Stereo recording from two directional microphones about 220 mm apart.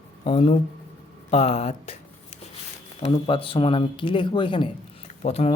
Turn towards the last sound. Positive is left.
turn(degrees=25)  # may be behind; listen again after turning